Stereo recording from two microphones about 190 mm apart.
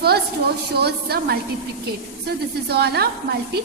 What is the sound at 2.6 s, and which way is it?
Speech, 60° right (ahead or behind).